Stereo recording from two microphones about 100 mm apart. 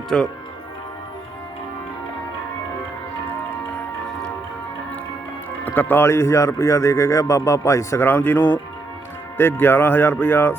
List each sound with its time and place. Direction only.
0.1 s speech: 5° left (ahead or behind)
5.6 s speech: 20° left (ahead or behind)